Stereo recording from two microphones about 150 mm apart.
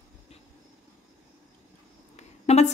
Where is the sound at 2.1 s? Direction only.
50° left (ahead or behind).